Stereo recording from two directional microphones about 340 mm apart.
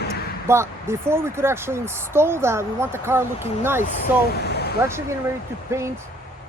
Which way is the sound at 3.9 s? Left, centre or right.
Left.